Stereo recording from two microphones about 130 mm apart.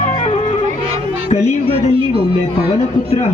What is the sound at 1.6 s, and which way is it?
Speech, 45° right (ahead or behind).